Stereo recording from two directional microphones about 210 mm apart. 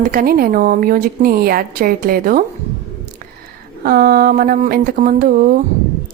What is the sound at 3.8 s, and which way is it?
A woman's voice, 45° right (ahead or behind).